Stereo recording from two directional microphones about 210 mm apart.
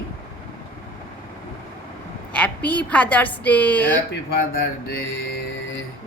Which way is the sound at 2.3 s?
5° left (ahead or behind).